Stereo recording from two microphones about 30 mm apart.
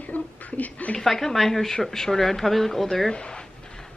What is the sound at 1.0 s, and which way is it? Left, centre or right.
Speech, centre.